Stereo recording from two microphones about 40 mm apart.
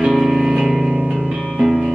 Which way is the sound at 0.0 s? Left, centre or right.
Centre.